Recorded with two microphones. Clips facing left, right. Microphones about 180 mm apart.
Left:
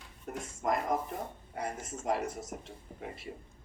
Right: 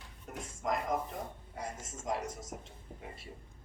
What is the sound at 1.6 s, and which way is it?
Speech, 60° left (ahead or behind).